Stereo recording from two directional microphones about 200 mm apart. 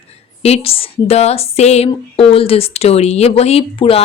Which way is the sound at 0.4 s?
30° left (ahead or behind).